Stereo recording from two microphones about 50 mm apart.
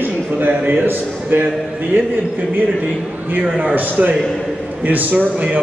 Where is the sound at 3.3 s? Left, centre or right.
Right.